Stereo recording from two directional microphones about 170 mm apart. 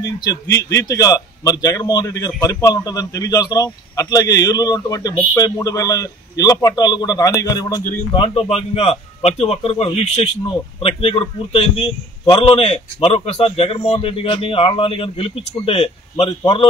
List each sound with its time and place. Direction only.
0.2 s a man's voice: 20° left (ahead or behind); by 16.3 s 35° left (ahead or behind)